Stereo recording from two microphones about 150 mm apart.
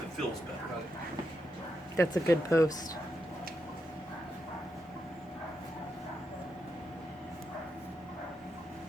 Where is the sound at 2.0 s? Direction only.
20° left (ahead or behind).